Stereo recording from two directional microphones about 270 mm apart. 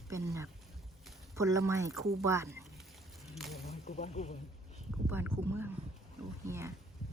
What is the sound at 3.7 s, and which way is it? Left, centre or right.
Speech, left.